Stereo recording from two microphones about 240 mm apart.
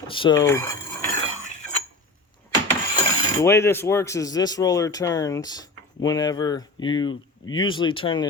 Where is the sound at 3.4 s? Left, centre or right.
Centre.